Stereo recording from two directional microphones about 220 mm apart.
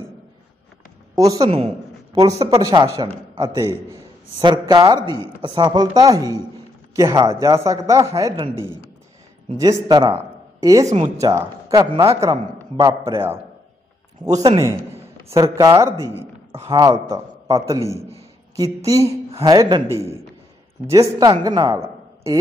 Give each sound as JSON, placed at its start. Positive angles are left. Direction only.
{"t": 1.2, "sound": "a man's voice", "side_deg": -20}
{"t": 9.6, "sound": "speech", "side_deg": -20}
{"t": 14.2, "sound": "a man's voice", "side_deg": -15}